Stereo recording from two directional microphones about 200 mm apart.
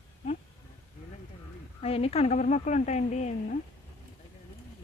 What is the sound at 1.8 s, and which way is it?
A woman's voice, 30° left (ahead or behind).